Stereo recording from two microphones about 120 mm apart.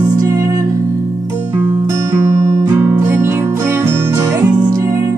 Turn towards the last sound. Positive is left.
turn(degrees=-20)  # may be behind; listen again after turning